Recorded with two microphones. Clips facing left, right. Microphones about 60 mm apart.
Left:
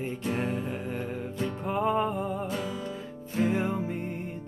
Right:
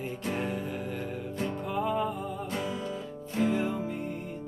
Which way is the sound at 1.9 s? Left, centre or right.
Left.